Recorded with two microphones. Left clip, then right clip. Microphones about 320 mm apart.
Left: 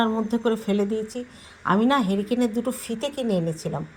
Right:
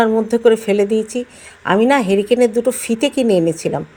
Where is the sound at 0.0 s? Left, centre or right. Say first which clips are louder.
Right 11 dB; right.